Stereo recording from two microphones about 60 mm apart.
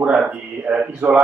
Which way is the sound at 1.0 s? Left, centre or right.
Right.